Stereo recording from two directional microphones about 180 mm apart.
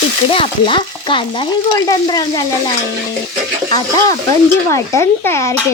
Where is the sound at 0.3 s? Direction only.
30° left (ahead or behind).